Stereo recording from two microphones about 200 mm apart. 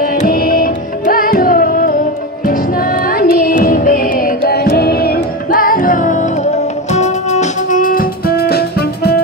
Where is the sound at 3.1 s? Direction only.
45° left (ahead or behind).